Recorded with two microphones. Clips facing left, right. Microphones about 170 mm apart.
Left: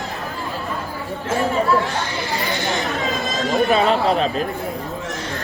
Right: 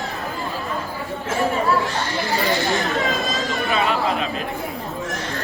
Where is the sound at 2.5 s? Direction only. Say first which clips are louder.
Right 2 dB; 20° left (ahead or behind).